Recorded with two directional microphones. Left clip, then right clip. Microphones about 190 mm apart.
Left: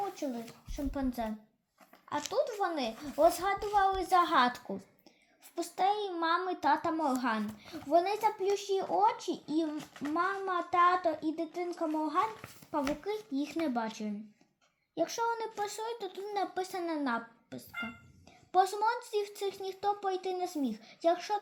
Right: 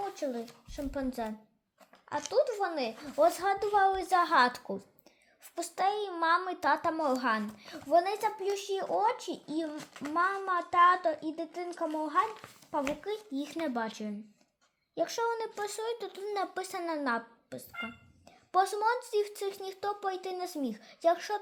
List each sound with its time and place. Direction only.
0.2 s speech: 25° right (ahead or behind)
2.3 s speech: 25° right (ahead or behind)
9.7 s a child's voice: 5° right (ahead or behind)
10.1 s speech: 20° right (ahead or behind)